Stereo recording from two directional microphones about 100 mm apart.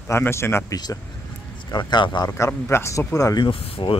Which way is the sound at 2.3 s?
25° left (ahead or behind).